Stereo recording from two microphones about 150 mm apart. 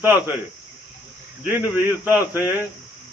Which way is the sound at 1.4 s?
10° right (ahead or behind).